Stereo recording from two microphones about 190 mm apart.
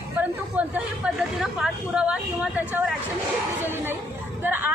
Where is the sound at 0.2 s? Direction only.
10° right (ahead or behind).